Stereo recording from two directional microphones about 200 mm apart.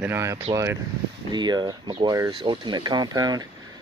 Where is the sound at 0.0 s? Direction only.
15° right (ahead or behind).